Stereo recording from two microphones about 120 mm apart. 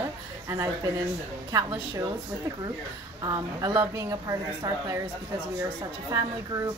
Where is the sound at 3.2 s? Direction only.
30° right (ahead or behind).